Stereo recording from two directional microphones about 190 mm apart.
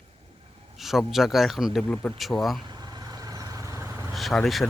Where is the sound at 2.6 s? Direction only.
25° right (ahead or behind).